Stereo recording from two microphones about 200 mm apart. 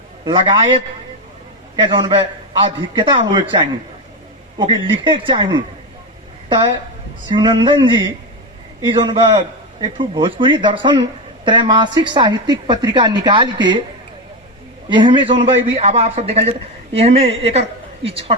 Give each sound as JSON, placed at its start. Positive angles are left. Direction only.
{"t": 0.3, "sound": "a man's voice", "side_deg": -25}
{"t": 7.3, "sound": "a man's voice", "side_deg": -25}
{"t": 14.8, "sound": "a man's voice", "side_deg": -25}